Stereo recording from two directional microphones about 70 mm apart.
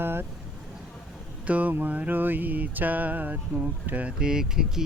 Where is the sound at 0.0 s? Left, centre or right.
Right.